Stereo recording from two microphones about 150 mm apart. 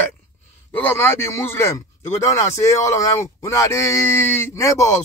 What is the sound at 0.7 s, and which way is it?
Speech, 15° left (ahead or behind).